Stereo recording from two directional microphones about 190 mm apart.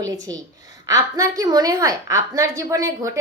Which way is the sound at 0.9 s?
20° right (ahead or behind).